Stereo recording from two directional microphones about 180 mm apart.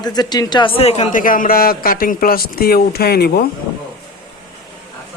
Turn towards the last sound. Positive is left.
turn(degrees=60)  # may be behind; listen again after turning